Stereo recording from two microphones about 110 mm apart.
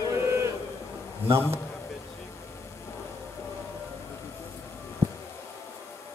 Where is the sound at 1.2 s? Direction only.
20° right (ahead or behind).